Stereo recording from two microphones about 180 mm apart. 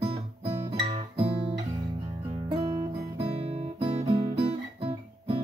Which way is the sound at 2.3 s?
30° right (ahead or behind).